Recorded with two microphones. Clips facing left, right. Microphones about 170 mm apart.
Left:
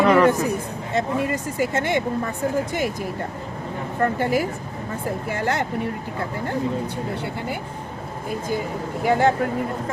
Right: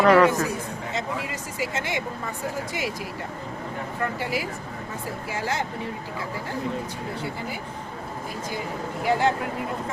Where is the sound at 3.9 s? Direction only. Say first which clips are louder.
Left 8 dB; 50° left (ahead or behind).